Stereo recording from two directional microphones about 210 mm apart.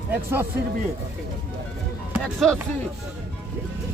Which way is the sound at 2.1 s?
Centre (ahead or behind).